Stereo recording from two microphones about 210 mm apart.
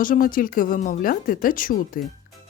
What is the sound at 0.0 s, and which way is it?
Speech, 40° left (ahead or behind).